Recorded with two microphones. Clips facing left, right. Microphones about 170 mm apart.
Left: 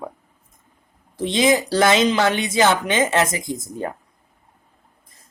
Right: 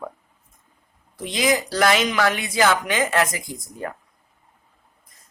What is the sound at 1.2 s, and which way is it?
Speech, 25° left (ahead or behind).